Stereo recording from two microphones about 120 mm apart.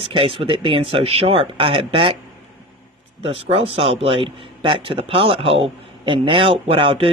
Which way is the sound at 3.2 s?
55° right (ahead or behind).